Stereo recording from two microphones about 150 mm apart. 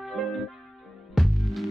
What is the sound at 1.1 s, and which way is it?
Music, centre (ahead or behind).